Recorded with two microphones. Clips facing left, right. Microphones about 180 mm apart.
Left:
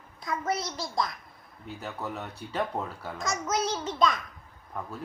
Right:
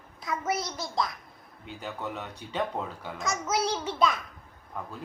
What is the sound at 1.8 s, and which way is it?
Speech, 5° left (ahead or behind).